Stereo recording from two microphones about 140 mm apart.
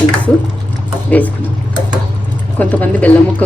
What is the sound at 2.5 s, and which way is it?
Speech, 10° left (ahead or behind).